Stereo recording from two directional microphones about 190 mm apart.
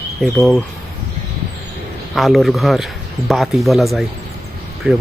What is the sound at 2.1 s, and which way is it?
A man's voice, centre (ahead or behind).